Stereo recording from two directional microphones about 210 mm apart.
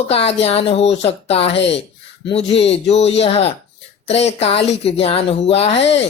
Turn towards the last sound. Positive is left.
turn(degrees=30)  # may be behind; listen again after turning